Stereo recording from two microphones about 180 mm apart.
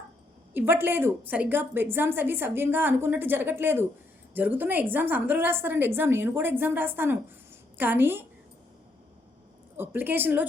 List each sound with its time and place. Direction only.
0.5 s a woman's voice: 10° right (ahead or behind)
9.7 s a woman's voice: 10° right (ahead or behind)